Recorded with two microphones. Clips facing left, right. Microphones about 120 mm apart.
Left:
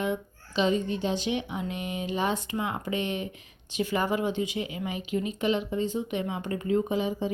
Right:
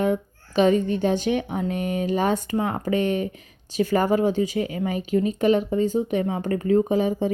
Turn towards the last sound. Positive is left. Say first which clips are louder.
# right 6 dB
turn(degrees=-50)  # may be behind; listen again after turning